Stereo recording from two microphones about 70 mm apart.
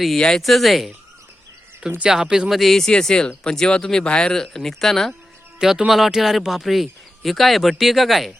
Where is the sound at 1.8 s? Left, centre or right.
Centre.